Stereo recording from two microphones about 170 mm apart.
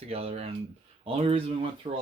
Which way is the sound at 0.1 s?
35° right (ahead or behind).